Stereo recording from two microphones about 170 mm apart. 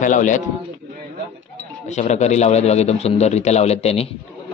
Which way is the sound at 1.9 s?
40° left (ahead or behind).